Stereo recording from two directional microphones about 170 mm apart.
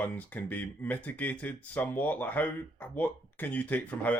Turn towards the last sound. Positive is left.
turn(degrees=10)  # may be behind; listen again after turning